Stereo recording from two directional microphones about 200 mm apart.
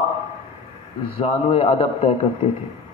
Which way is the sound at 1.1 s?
25° left (ahead or behind).